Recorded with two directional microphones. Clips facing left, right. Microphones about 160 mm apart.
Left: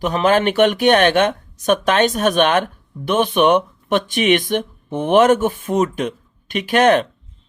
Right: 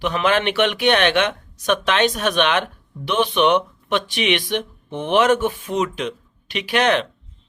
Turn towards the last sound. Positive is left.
turn(degrees=50)  # may be behind; listen again after turning